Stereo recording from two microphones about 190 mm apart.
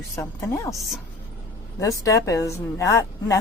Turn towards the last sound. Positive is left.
turn(degrees=15)  # may be behind; listen again after turning